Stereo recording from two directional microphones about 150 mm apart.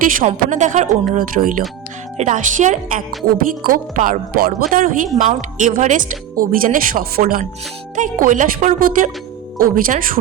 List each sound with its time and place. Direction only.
0.0 s a woman's voice: 60° right (ahead or behind)
1.1 s speech: 65° right (ahead or behind)
2.1 s speech: 55° right (ahead or behind)
3.3 s speech: 75° right (ahead or behind)